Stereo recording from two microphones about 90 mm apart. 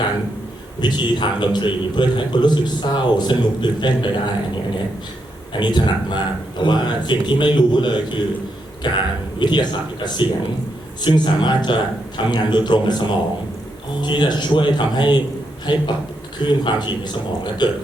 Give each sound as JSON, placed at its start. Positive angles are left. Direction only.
{"t": 0.8, "sound": "a man's voice", "side_deg": 60}
{"t": 5.5, "sound": "a man's voice", "side_deg": 60}